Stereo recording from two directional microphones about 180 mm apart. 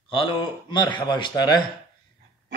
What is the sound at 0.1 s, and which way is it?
A man's voice, 30° left (ahead or behind).